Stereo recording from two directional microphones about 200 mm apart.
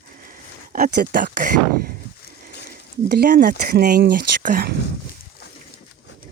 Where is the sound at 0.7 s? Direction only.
45° right (ahead or behind).